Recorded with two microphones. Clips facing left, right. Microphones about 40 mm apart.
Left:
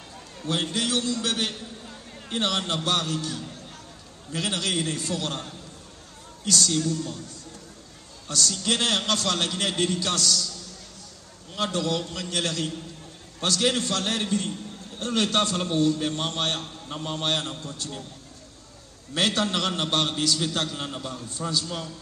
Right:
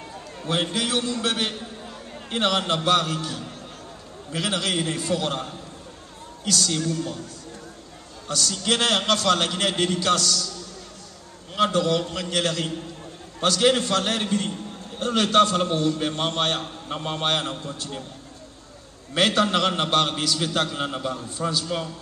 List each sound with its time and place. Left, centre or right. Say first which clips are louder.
0.5 s a man's voice: right 2 dB; right
8.3 s a man's voice: right 2 dB; right
11.5 s a man's voice: right 5 dB; right
19.1 s a man's voice: right 4 dB; right